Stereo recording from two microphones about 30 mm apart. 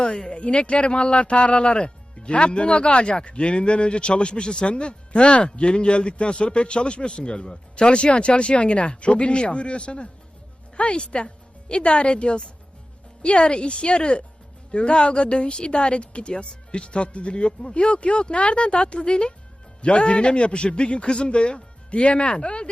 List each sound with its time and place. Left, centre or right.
0.1 s speech: left